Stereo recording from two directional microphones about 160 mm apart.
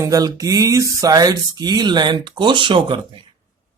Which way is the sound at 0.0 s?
20° right (ahead or behind).